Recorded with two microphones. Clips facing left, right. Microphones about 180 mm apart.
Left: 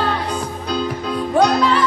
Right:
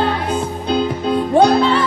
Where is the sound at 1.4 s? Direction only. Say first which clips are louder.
Right 2 dB; 30° right (ahead or behind).